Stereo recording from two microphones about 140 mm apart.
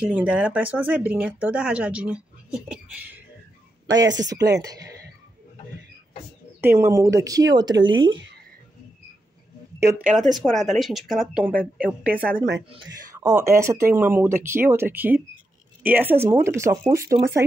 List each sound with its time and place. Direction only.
0.1 s speech: 10° right (ahead or behind)
3.8 s speech: 30° right (ahead or behind)
6.6 s speech: 15° right (ahead or behind); by 8.1 s 30° right (ahead or behind)
9.8 s speech: 15° right (ahead or behind)
10.4 s speech: centre (ahead or behind); by 17.5 s 20° right (ahead or behind)